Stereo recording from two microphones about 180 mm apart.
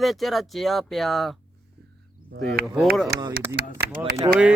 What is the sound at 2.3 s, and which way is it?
Speech, 75° right (ahead or behind).